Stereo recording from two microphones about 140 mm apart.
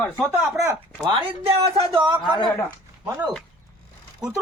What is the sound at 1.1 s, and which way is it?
Speech, 45° right (ahead or behind).